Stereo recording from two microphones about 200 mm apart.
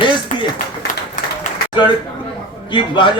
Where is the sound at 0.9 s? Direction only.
40° left (ahead or behind).